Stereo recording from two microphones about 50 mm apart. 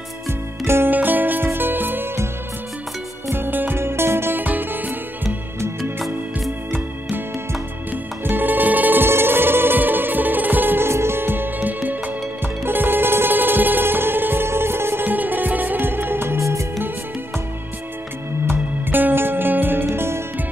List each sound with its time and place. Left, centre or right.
0.3 s music: right
0.8 s music: right
3.3 s music: right
3.8 s music: right
5.8 s music: centre
7.9 s music: right
9.0 s music: right
10.9 s music: right
15.0 s music: right
16.3 s music: right
18.5 s music: right
19.9 s music: right